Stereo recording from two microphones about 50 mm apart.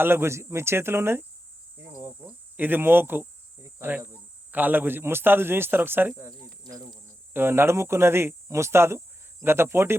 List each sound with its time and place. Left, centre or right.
0.0 s speech: right
1.8 s cricket: right
2.6 s a man's voice: right
7.3 s speech: right